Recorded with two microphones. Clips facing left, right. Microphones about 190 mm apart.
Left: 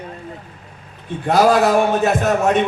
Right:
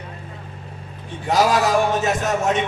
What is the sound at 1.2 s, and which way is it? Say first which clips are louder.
A man's voice: left 4 dB; 60° left (ahead or behind).